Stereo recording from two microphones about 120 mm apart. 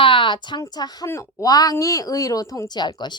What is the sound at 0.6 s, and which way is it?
Speech, 30° left (ahead or behind).